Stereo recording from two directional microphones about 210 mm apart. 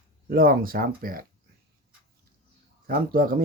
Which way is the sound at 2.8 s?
45° right (ahead or behind).